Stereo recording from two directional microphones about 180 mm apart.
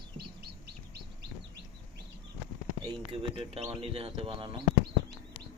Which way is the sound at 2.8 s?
30° right (ahead or behind).